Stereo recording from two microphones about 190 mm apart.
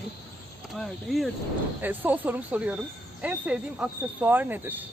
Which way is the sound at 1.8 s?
10° right (ahead or behind).